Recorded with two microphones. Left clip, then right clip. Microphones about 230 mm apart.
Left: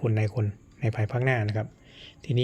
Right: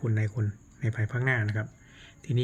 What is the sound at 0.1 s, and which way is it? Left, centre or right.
Speech, left.